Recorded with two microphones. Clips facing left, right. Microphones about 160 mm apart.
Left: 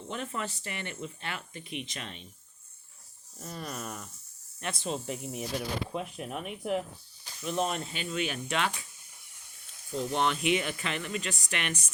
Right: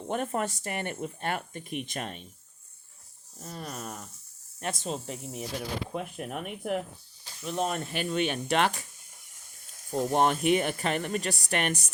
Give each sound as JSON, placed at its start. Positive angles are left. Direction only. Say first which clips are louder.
{"t": 0.1, "sound": "speech", "louder": "right 6 dB", "side_deg": -50}
{"t": 3.4, "sound": "speech", "louder": "even", "side_deg": -35}
{"t": 7.4, "sound": "speech", "louder": "right 1 dB", "side_deg": -40}
{"t": 9.9, "sound": "speech", "louder": "right 4 dB", "side_deg": -45}